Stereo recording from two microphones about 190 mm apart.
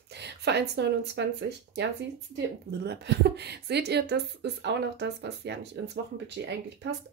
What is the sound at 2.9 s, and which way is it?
Speech, 60° right (ahead or behind).